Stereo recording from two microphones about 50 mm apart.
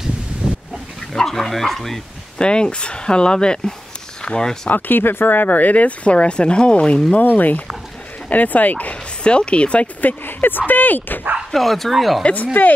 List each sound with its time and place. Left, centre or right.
0.4 s a sound: centre
1.1 s speech: centre
2.3 s speech: centre
4.6 s speech: left
7.1 s speech: left
9.2 s speech: centre
10.0 s speech: left
11.5 s speech: centre
12.2 s speech: left